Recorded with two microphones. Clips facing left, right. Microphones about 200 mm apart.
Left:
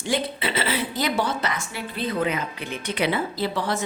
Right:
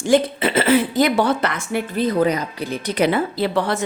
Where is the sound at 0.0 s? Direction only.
45° right (ahead or behind).